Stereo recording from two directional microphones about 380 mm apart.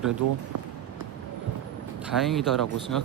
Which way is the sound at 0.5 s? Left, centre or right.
Right.